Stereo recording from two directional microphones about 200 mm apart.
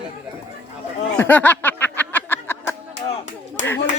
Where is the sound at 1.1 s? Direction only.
10° left (ahead or behind).